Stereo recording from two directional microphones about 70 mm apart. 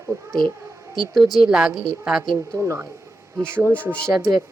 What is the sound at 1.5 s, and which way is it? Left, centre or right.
Speech, centre.